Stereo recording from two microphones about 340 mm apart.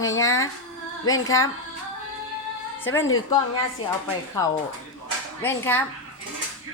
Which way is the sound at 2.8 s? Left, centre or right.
Centre.